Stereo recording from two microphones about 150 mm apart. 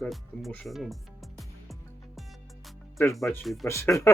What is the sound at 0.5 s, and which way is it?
Music, 5° left (ahead or behind).